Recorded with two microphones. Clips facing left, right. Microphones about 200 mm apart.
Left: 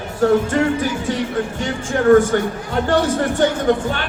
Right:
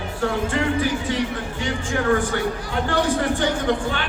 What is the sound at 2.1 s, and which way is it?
Speech, 45° left (ahead or behind).